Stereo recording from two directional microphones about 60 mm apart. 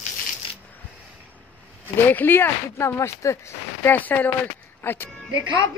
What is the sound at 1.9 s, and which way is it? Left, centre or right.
Speech, left.